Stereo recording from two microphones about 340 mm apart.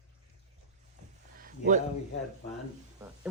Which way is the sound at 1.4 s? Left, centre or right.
Right.